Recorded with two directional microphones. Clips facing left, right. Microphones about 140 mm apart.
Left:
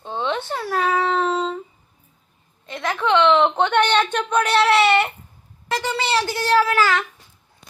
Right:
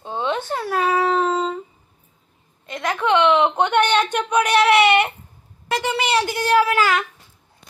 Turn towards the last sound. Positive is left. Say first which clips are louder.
# right 1 dB
turn(degrees=-15)  # may be behind; listen again after turning